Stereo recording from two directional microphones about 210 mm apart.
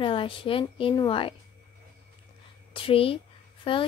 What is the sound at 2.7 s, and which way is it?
A woman's voice, 25° left (ahead or behind).